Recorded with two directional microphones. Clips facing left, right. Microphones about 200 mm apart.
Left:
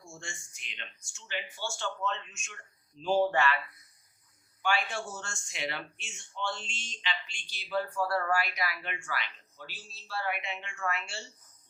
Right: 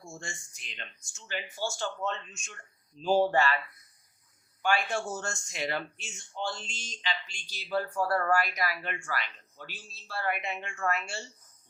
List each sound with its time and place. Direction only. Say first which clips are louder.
0.1 s speech: right 3 dB; 40° right (ahead or behind)
4.6 s speech: right 3 dB; 45° right (ahead or behind)